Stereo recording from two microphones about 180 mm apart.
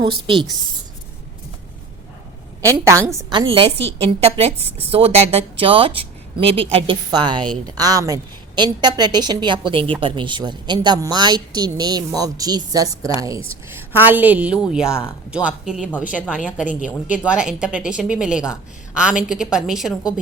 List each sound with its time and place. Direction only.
0.0 s a woman's voice: 25° right (ahead or behind)
2.6 s a woman's voice: 20° right (ahead or behind)
17.1 s a woman's voice: 5° right (ahead or behind)